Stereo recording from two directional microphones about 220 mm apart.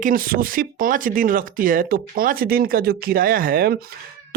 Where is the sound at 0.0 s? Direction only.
40° right (ahead or behind).